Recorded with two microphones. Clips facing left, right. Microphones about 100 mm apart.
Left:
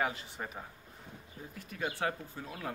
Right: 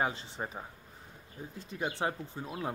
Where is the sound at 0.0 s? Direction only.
30° right (ahead or behind).